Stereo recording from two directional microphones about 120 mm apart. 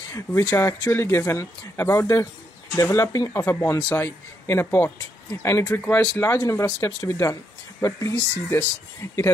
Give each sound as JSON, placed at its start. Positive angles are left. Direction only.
{"t": 0.1, "sound": "speech", "side_deg": 20}
{"t": 5.8, "sound": "speech", "side_deg": 10}
{"t": 6.1, "sound": "speech", "side_deg": 25}